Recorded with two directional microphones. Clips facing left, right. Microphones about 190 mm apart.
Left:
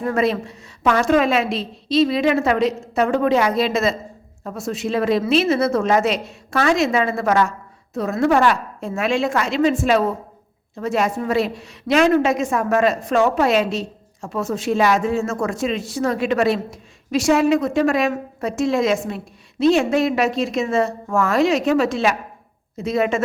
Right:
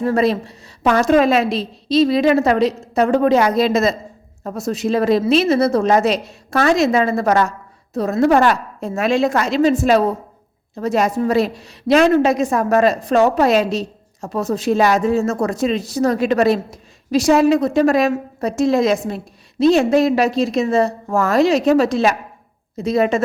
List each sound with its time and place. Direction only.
0.0 s a woman's voice: 35° right (ahead or behind)